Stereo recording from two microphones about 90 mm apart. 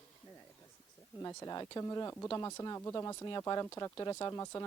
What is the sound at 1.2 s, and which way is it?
Speech, 35° left (ahead or behind).